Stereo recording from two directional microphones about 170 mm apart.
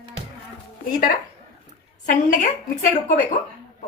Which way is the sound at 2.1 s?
50° left (ahead or behind).